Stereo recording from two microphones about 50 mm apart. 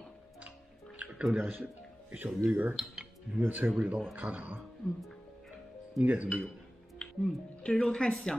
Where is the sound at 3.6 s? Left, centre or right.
Right.